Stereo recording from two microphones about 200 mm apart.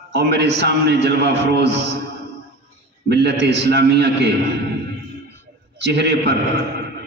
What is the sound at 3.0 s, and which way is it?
A man's voice, 55° right (ahead or behind).